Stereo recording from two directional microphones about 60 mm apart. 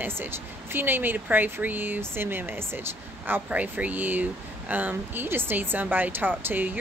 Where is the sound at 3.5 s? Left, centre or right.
Right.